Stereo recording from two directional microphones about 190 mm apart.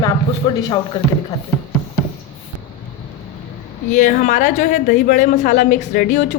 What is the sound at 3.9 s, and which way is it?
Speech, 40° left (ahead or behind).